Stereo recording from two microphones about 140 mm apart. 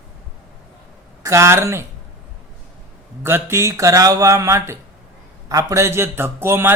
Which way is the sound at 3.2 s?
15° right (ahead or behind).